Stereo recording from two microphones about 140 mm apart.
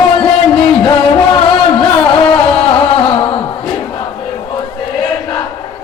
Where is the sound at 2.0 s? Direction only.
40° left (ahead or behind).